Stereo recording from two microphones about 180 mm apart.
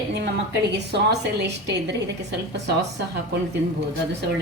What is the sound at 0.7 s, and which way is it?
A woman's voice, 70° right (ahead or behind).